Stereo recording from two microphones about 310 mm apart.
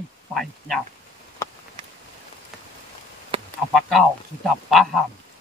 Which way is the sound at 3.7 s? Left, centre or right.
Centre.